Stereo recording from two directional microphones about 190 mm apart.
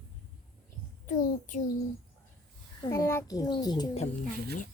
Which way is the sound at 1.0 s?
45° left (ahead or behind).